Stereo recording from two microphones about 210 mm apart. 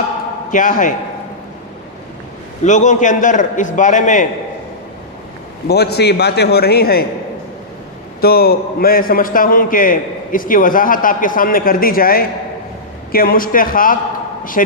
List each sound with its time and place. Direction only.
0.5 s a man's voice: 40° left (ahead or behind)
2.6 s a man's voice: 35° left (ahead or behind)
5.6 s a man's voice: 50° left (ahead or behind)
8.2 s a man's voice: 45° left (ahead or behind)